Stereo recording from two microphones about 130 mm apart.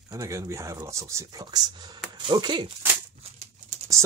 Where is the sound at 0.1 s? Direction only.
25° right (ahead or behind).